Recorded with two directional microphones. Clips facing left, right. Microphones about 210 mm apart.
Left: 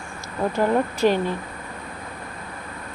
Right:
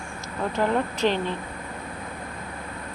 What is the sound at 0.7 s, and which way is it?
Speech, 10° left (ahead or behind).